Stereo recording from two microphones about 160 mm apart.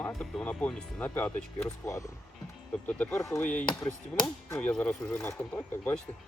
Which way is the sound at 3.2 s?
20° left (ahead or behind).